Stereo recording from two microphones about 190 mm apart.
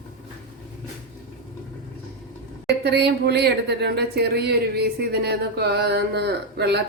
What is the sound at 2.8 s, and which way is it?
Speech, 60° right (ahead or behind).